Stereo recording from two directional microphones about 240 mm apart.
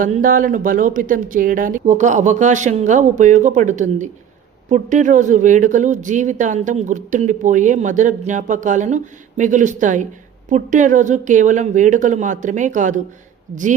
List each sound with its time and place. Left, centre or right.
0.0 s speech: right